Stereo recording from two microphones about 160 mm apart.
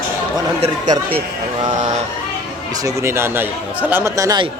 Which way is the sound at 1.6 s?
45° right (ahead or behind).